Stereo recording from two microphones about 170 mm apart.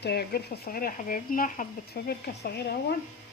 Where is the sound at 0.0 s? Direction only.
75° left (ahead or behind); by 1.6 s 55° left (ahead or behind).